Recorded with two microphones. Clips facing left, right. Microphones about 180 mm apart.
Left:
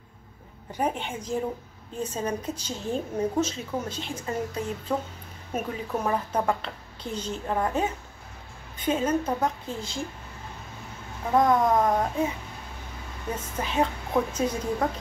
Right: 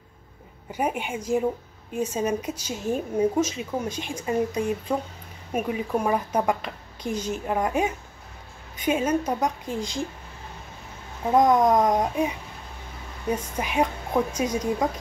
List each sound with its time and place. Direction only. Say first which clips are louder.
0.7 s a woman's voice: right 1 dB; 10° right (ahead or behind)
11.3 s a woman's voice: right 3 dB; 20° right (ahead or behind)